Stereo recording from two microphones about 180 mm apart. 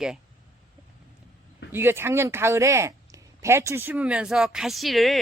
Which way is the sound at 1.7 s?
15° right (ahead or behind).